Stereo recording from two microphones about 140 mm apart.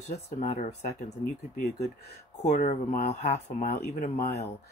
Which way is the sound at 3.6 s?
70° left (ahead or behind).